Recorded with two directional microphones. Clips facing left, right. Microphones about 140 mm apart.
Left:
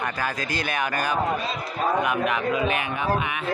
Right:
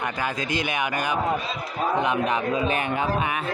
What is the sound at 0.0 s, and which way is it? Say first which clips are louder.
Speech: even; 20° right (ahead or behind).